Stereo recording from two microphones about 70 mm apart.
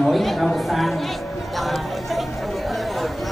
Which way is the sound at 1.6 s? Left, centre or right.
Centre.